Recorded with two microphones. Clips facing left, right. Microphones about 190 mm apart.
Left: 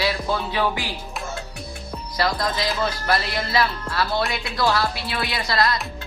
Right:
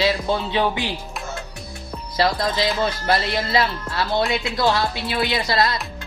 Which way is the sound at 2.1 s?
25° right (ahead or behind).